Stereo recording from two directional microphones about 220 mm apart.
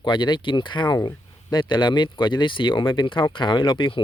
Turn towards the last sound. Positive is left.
turn(degrees=20)  # may be behind; listen again after turning